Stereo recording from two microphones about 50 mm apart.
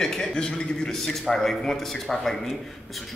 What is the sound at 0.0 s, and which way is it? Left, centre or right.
Speech, centre.